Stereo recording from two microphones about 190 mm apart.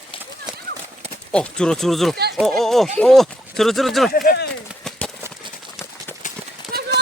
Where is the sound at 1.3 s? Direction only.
5° left (ahead or behind).